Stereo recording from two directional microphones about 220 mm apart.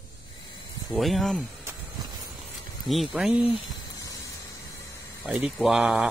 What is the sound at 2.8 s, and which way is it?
Speech, centre (ahead or behind).